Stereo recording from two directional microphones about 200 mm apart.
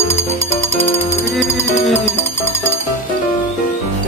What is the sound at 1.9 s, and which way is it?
Music, 35° left (ahead or behind).